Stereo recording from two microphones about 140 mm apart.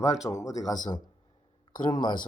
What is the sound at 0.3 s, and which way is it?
Speech, 25° left (ahead or behind).